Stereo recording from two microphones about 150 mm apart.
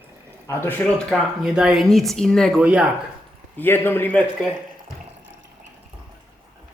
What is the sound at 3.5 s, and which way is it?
Speech, 15° left (ahead or behind).